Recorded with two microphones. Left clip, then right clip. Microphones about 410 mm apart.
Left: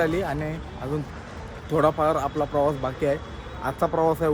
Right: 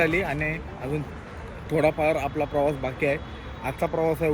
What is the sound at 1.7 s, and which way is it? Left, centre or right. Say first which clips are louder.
Speech: left 1 dB; centre.